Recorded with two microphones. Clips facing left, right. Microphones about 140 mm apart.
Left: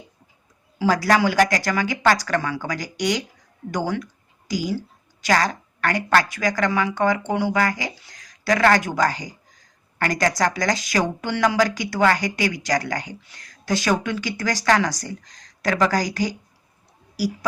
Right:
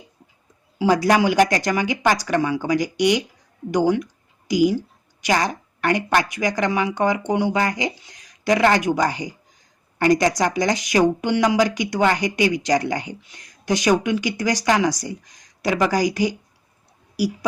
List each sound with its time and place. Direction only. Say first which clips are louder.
0.8 s a woman's voice: right 2 dB; 20° right (ahead or behind)